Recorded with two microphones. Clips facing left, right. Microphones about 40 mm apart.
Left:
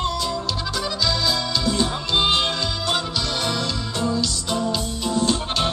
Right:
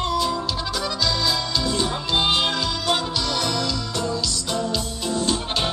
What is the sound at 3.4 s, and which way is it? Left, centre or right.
Music, centre.